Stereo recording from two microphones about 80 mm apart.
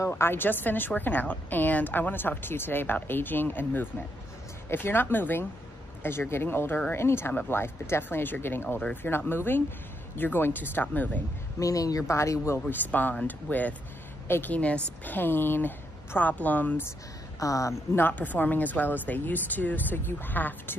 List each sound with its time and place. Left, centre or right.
0.1 s a woman's voice: left
11.6 s speech: left
12.5 s a woman's voice: left
17.4 s a woman's voice: left
17.9 s a woman's voice: left